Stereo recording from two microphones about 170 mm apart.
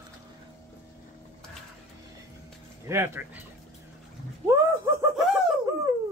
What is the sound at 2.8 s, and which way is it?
Speech, 15° right (ahead or behind).